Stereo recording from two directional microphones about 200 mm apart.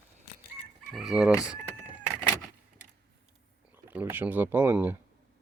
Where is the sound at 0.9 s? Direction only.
Centre (ahead or behind).